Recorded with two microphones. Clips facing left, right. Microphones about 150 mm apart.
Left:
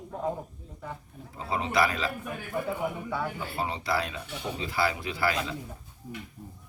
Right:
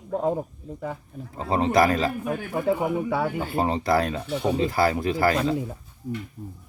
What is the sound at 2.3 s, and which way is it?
Speech, 90° right.